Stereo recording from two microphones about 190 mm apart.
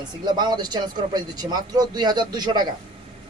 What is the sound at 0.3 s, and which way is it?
Speech, 20° right (ahead or behind).